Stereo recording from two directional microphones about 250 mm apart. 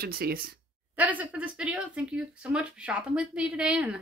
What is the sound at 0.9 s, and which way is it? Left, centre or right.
Speech, centre.